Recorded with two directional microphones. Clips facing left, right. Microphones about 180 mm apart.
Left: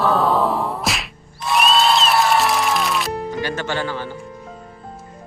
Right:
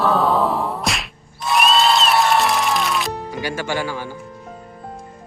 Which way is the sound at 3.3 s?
10° right (ahead or behind).